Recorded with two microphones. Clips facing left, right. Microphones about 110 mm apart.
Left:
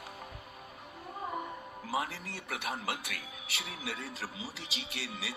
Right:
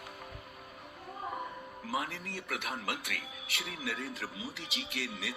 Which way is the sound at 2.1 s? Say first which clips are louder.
Right 1 dB; 50° right (ahead or behind).